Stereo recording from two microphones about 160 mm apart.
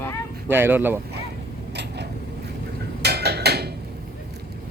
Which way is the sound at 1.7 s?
90° right.